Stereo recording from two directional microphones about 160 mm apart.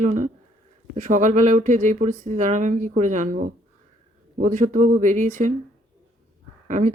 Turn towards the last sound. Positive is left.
turn(degrees=-50)  # may be behind; listen again after turning